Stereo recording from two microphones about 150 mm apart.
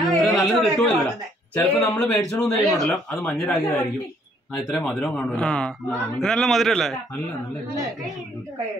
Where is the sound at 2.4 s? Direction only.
Centre (ahead or behind).